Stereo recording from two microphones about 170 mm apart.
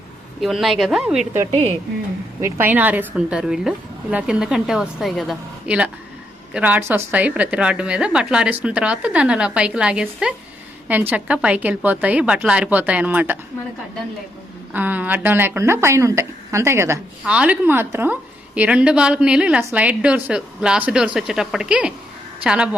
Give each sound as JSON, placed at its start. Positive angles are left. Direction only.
{"t": 0.4, "sound": "a woman's voice", "side_deg": 0}
{"t": 1.5, "sound": "speech", "side_deg": -40}
{"t": 2.4, "sound": "a woman's voice", "side_deg": -10}
{"t": 14.7, "sound": "a woman's voice", "side_deg": -10}